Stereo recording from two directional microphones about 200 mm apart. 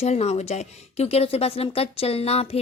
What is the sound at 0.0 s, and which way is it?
A woman's voice, 35° left (ahead or behind).